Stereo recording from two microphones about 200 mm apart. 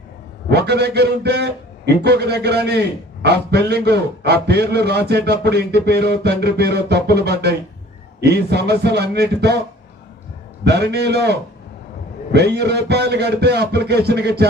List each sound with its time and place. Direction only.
0.5 s a man's voice: 55° right (ahead or behind)
10.6 s a man's voice: 55° right (ahead or behind)